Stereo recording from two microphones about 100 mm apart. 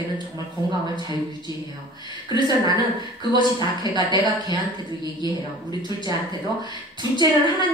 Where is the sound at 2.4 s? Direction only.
45° right (ahead or behind).